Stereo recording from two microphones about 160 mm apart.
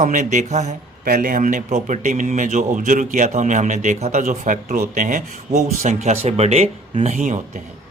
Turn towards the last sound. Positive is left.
turn(degrees=-45)  # may be behind; listen again after turning